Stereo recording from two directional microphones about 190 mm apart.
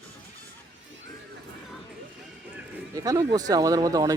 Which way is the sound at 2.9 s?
20° right (ahead or behind).